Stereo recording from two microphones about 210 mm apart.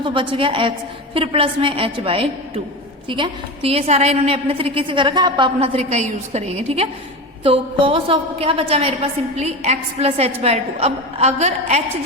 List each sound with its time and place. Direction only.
0.0 s a woman's voice: 25° right (ahead or behind)